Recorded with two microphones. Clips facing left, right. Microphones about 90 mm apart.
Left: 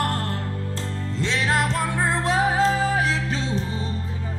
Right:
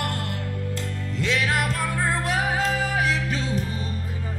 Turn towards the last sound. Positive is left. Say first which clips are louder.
# left 1 dB
turn(degrees=30)  # may be behind; listen again after turning